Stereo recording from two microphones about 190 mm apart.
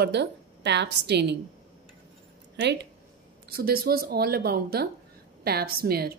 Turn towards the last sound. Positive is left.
turn(degrees=-55)  # may be behind; listen again after turning